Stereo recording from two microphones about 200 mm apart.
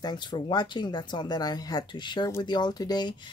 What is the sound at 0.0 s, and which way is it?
Speech, 20° left (ahead or behind).